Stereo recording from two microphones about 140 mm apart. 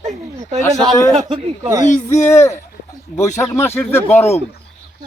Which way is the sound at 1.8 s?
60° left (ahead or behind).